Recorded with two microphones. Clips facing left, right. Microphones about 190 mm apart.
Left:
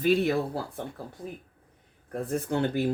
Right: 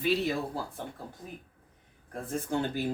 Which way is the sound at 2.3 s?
65° left (ahead or behind).